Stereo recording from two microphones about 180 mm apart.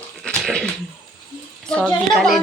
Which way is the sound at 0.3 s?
5° left (ahead or behind).